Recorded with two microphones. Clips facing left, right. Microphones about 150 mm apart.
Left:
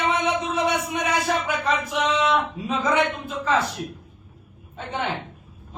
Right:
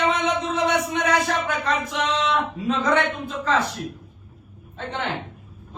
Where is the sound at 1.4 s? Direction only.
10° left (ahead or behind).